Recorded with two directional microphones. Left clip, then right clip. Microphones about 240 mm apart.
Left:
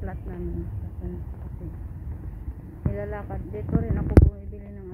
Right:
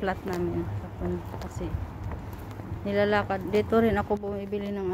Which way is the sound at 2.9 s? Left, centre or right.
Right.